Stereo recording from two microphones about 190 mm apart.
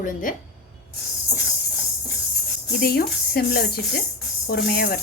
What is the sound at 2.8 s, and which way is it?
Speech, 55° left (ahead or behind).